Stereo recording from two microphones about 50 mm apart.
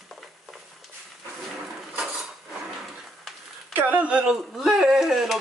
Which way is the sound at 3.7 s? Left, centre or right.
Right.